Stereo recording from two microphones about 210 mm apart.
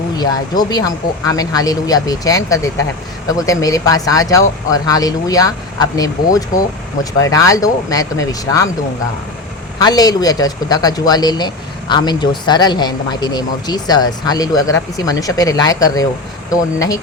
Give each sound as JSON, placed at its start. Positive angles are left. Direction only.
{"t": 0.2, "sound": "a man's voice", "side_deg": 20}
{"t": 9.7, "sound": "a man's voice", "side_deg": 20}